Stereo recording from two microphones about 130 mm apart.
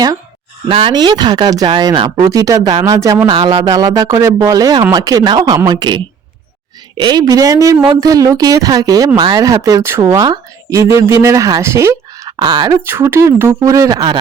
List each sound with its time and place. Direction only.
0.7 s speech: 40° right (ahead or behind); by 3.2 s 25° right (ahead or behind)
3.2 s speech: 40° right (ahead or behind)
12.8 s speech: 20° right (ahead or behind)